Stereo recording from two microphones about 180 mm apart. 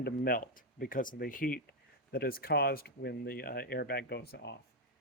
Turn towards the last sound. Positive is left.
turn(degrees=65)  # may be behind; listen again after turning